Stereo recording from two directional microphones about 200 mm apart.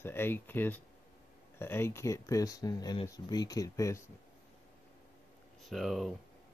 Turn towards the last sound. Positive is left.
turn(degrees=0)  # may be behind; listen again after turning